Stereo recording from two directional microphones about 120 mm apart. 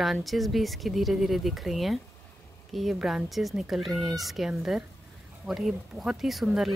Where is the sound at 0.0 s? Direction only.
Centre (ahead or behind).